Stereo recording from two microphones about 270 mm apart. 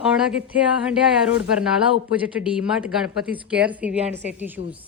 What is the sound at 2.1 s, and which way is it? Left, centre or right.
Speech, centre.